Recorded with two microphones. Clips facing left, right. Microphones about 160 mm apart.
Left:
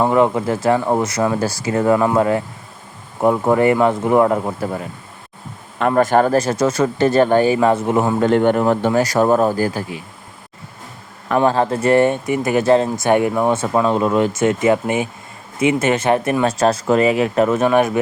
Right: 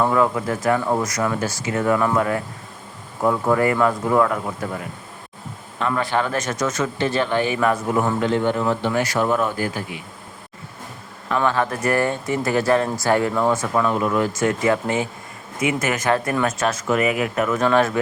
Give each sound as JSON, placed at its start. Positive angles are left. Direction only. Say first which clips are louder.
{"t": 0.0, "sound": "speech", "louder": "left 4 dB", "side_deg": 25}
{"t": 5.8, "sound": "speech", "louder": "left 8 dB", "side_deg": 45}
{"t": 8.2, "sound": "speech", "louder": "left 6 dB", "side_deg": 55}
{"t": 8.9, "sound": "speech", "louder": "left 6 dB", "side_deg": 40}
{"t": 11.4, "sound": "speech", "louder": "left 5 dB", "side_deg": 30}